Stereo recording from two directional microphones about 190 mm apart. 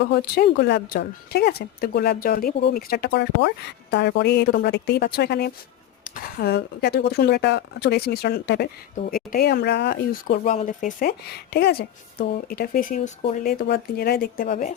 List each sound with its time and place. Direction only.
0.0 s speech: 60° left (ahead or behind)
6.1 s speech: 50° left (ahead or behind)
11.3 s speech: 55° left (ahead or behind)
14.5 s speech: 40° left (ahead or behind)